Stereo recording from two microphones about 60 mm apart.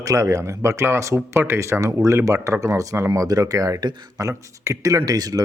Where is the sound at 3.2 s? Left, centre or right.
Right.